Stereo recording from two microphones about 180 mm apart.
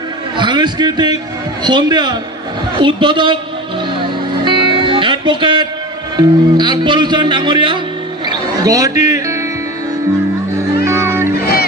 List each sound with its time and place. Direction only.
0.4 s a man's voice: 25° right (ahead or behind)
4.5 s music: 25° right (ahead or behind)
6.1 s a man's voice: 25° right (ahead or behind)
8.3 s music: 20° right (ahead or behind)
10.9 s music: 15° right (ahead or behind)